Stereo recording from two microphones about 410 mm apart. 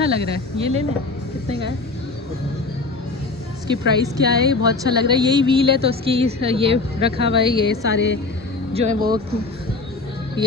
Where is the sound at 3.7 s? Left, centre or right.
Centre.